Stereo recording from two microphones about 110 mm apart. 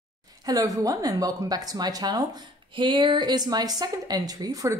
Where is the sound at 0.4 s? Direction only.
35° right (ahead or behind).